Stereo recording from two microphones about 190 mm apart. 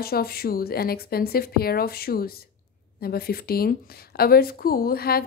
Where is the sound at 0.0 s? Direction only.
55° left (ahead or behind).